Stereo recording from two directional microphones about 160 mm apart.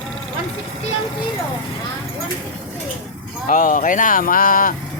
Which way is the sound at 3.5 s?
55° left (ahead or behind).